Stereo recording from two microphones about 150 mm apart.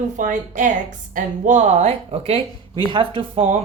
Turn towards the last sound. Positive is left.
turn(degrees=-40)  # may be behind; listen again after turning